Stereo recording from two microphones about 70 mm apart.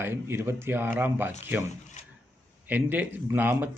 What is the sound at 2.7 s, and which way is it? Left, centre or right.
Speech, right.